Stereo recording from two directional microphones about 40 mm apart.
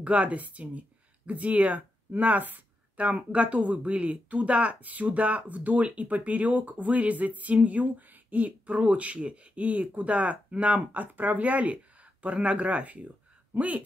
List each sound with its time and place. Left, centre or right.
0.0 s speech: right